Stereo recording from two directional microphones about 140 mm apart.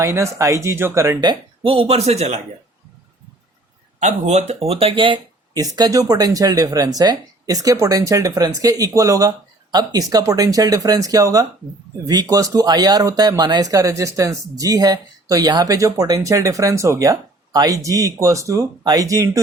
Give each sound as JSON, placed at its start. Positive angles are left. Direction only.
{"t": 0.0, "sound": "speech", "side_deg": -20}
{"t": 1.2, "sound": "speech", "side_deg": -35}
{"t": 4.0, "sound": "speech", "side_deg": -55}